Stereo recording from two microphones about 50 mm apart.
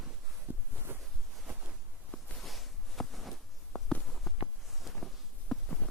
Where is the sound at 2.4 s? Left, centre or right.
Centre.